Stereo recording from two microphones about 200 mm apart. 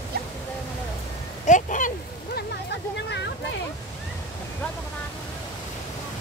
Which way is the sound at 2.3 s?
55° left (ahead or behind).